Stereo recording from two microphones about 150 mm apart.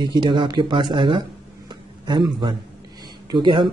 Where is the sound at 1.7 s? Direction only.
30° right (ahead or behind).